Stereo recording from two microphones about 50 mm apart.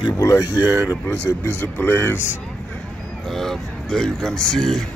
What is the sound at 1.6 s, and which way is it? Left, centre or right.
Speech, left.